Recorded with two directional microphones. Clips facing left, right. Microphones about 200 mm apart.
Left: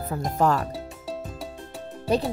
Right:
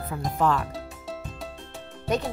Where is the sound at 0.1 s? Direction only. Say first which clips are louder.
Left 2 dB; 40° left (ahead or behind).